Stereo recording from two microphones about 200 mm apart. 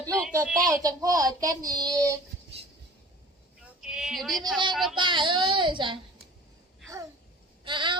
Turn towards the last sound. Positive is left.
turn(degrees=-25)  # may be behind; listen again after turning